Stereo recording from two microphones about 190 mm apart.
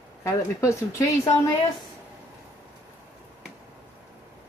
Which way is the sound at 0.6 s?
15° left (ahead or behind).